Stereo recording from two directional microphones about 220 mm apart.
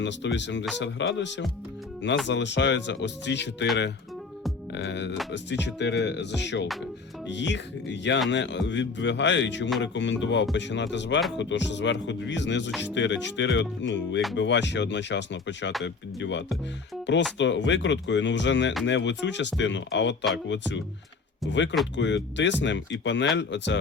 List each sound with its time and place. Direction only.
0.0 s speech: 55° left (ahead or behind)
4.7 s speech: 50° left (ahead or behind)